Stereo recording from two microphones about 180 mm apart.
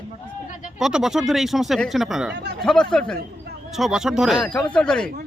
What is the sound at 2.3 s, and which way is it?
Speech, 65° right (ahead or behind).